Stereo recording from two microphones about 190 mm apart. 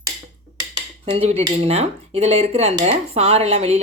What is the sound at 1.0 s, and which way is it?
Speech, 30° right (ahead or behind).